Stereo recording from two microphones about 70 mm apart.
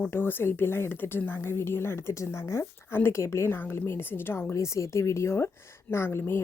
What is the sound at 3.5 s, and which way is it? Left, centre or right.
A woman's voice, left.